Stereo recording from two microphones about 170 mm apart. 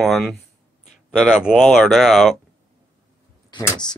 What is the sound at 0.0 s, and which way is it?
Speech, centre (ahead or behind).